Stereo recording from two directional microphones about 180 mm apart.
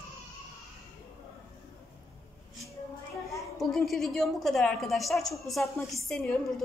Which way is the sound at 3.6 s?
Centre (ahead or behind).